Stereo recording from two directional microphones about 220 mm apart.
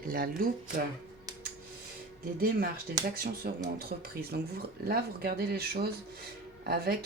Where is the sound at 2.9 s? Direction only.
45° right (ahead or behind).